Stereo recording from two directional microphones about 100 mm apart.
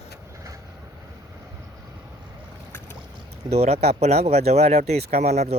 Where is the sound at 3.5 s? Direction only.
90° right.